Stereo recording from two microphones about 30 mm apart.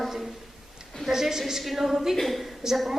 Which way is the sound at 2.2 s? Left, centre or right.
Centre.